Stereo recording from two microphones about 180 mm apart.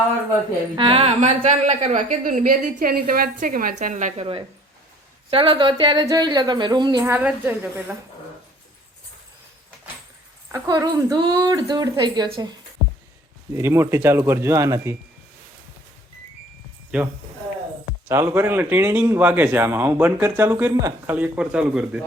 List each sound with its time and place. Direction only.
0.8 s a woman's voice: 30° right (ahead or behind)
5.3 s speech: 30° right (ahead or behind)
7.0 s a man's voice: 10° right (ahead or behind)
10.5 s speech: 15° right (ahead or behind)
13.5 s a man's voice: 15° right (ahead or behind)
16.9 s speech: 5° right (ahead or behind)
18.1 s a man's voice: 15° right (ahead or behind)